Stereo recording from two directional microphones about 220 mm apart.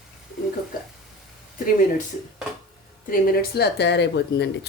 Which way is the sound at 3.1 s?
45° left (ahead or behind).